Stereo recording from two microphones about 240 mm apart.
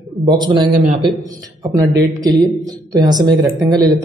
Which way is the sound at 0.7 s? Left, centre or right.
Right.